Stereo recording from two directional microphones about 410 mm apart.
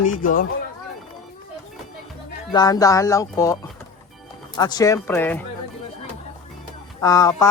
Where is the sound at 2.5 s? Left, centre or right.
Centre.